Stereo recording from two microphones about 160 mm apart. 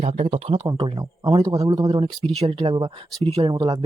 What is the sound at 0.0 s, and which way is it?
Speech, 40° right (ahead or behind).